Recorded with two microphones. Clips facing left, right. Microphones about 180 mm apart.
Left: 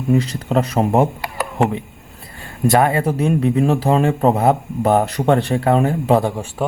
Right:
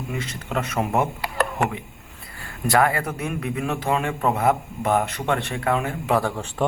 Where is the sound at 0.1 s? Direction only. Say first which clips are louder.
Left 13 dB; 35° left (ahead or behind).